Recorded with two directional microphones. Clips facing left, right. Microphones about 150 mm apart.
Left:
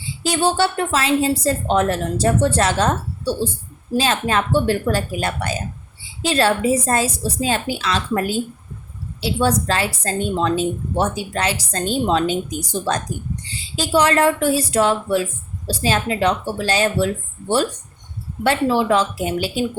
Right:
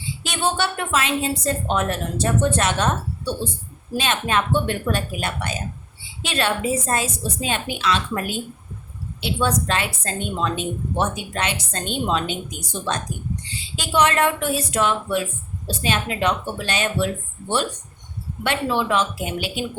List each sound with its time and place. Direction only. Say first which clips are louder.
0.2 s a woman's voice: left 6 dB; 35° left (ahead or behind)
18.4 s a woman's voice: left 5 dB; 35° left (ahead or behind)